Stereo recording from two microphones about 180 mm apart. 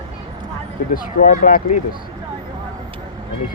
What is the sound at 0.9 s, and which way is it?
Speech, 45° left (ahead or behind).